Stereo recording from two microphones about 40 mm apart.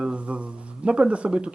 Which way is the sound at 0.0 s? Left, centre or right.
Right.